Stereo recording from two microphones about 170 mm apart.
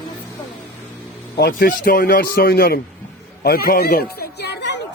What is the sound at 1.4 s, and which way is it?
A man's voice, 60° left (ahead or behind).